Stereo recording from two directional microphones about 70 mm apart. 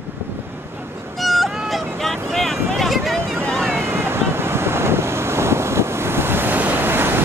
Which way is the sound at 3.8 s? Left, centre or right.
Right.